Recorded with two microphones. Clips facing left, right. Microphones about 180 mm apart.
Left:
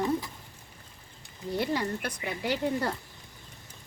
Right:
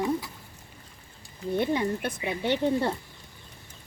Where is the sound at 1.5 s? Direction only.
20° right (ahead or behind).